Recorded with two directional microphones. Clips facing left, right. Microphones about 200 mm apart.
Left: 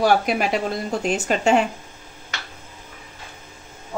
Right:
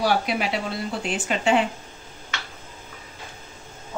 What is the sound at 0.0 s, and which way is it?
Speech, 45° left (ahead or behind).